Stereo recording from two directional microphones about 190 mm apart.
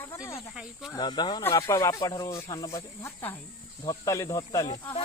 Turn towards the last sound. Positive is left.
turn(degrees=20)  # may be behind; listen again after turning